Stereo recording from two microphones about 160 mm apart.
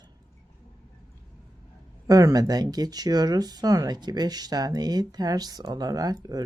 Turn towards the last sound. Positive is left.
turn(degrees=-25)  # may be behind; listen again after turning